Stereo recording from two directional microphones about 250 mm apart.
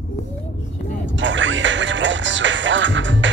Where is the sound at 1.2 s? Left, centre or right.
Right.